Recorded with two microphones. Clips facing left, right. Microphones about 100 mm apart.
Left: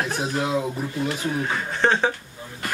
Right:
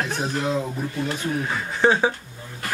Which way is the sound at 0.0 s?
5° left (ahead or behind).